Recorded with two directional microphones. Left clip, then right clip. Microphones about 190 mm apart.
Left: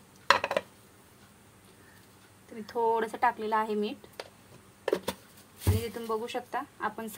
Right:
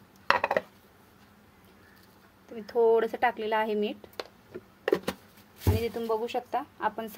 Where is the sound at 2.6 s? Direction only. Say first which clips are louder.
Right 5 dB; 20° right (ahead or behind).